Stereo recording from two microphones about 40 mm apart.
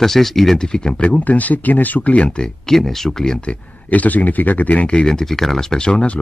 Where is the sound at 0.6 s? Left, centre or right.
Centre.